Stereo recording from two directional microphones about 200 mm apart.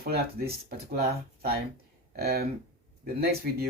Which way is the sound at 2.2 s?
50° right (ahead or behind).